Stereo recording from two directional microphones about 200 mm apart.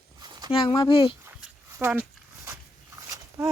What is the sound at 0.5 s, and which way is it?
Speech, 25° left (ahead or behind).